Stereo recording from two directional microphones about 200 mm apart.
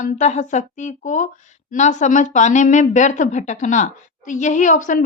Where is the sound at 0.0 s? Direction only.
35° left (ahead or behind).